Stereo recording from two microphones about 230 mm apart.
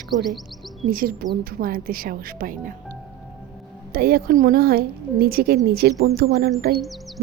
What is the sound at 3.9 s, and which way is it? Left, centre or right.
A woman's voice, right.